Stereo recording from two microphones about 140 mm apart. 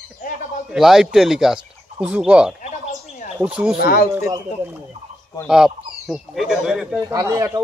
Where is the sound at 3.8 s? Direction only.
90° left.